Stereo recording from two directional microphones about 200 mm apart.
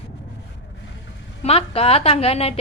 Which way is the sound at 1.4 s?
30° left (ahead or behind).